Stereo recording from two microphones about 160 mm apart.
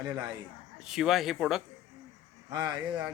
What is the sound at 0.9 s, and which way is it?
Speech, centre (ahead or behind).